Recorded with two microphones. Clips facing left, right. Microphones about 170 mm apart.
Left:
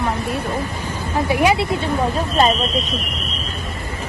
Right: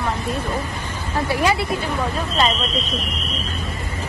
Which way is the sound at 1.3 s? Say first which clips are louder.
Left 4 dB; 15° left (ahead or behind).